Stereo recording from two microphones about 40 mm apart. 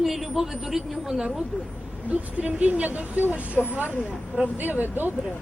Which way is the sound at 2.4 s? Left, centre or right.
Right.